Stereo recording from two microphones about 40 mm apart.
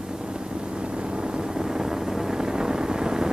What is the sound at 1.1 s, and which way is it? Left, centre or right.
Vehicle, centre.